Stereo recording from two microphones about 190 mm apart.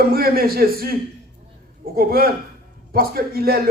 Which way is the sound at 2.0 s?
50° right (ahead or behind).